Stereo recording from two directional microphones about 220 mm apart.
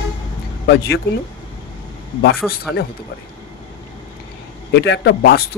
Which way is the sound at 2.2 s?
45° left (ahead or behind).